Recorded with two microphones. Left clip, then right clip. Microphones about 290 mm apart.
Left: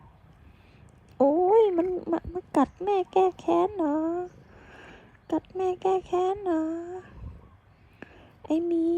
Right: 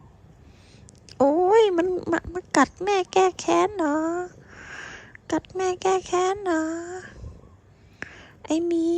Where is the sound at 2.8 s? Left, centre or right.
Left.